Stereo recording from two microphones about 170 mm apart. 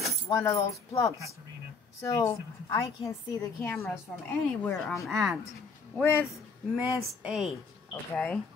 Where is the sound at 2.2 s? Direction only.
20° left (ahead or behind).